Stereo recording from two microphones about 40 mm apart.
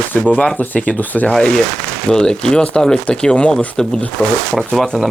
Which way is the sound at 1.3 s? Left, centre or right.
Centre.